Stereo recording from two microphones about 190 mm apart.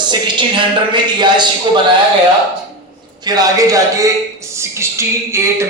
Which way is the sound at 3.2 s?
20° right (ahead or behind).